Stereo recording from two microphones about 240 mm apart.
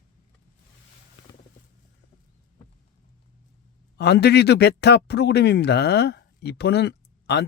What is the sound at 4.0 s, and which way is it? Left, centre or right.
A man's voice, left.